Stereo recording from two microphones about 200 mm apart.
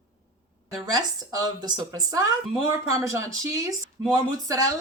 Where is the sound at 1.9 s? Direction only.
15° right (ahead or behind).